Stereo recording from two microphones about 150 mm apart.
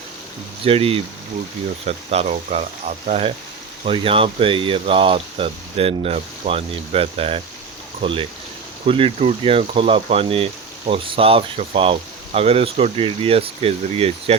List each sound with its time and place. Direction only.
0.6 s speech: 40° right (ahead or behind)
2.0 s speech: 45° right (ahead or behind)